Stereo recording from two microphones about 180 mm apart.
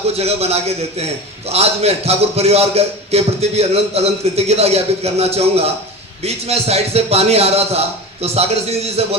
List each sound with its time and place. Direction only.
0.1 s a man's voice: 35° right (ahead or behind)